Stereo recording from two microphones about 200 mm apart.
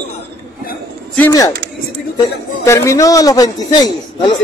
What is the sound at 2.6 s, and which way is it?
A man's voice, 15° left (ahead or behind).